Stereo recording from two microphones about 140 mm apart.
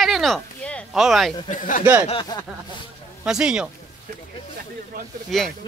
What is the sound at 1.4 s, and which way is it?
Speech, 70° left (ahead or behind).